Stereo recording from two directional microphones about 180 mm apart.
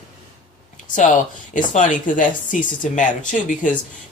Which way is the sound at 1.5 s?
45° left (ahead or behind).